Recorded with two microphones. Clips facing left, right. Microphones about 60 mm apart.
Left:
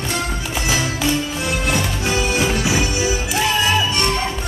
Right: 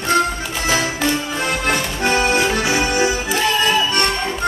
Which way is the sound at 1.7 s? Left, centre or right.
Right.